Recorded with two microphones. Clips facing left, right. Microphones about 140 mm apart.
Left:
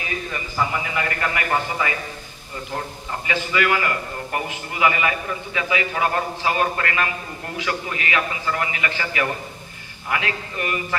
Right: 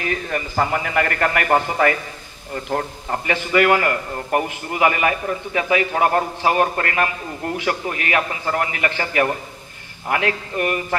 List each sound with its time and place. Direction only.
0.0 s a man's voice: 55° right (ahead or behind)